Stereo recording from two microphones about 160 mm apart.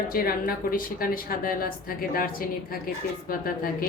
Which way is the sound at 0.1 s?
65° left (ahead or behind).